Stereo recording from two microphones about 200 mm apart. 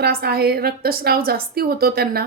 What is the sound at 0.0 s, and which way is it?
A woman's voice, 50° right (ahead or behind).